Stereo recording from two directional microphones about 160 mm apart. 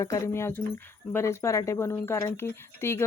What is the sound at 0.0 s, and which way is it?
Speech, 20° left (ahead or behind).